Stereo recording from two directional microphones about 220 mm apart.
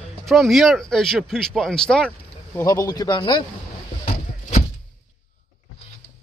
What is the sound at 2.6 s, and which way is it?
Speech, 15° left (ahead or behind).